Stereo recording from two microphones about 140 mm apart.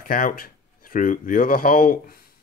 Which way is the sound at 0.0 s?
90° left.